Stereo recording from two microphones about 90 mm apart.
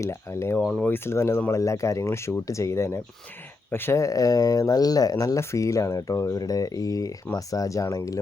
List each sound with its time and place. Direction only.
0.0 s speech: 30° left (ahead or behind)
0.6 s speech: 5° left (ahead or behind)
0.9 s speech: 25° left (ahead or behind)